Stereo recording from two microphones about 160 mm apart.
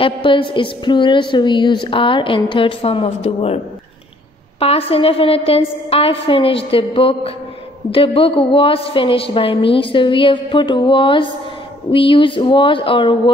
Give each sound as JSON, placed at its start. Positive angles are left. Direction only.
{"t": 0.0, "sound": "a woman's voice", "side_deg": 30}
{"t": 4.6, "sound": "a woman's voice", "side_deg": 35}